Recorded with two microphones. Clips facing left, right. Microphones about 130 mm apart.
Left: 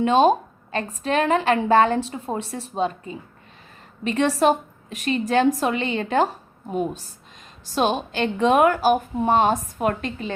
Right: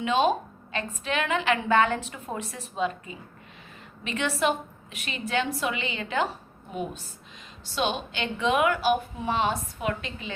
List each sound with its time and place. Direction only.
0.0 s a woman's voice: 40° left (ahead or behind)